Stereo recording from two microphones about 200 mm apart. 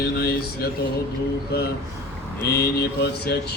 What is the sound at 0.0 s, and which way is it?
Mantra, 50° left (ahead or behind).